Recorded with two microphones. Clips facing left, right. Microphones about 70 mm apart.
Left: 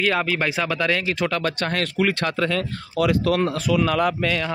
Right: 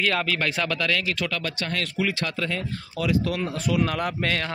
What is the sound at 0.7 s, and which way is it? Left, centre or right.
Speech, left.